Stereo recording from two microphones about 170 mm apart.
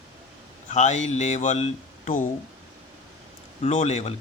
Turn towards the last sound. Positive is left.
turn(degrees=40)  # may be behind; listen again after turning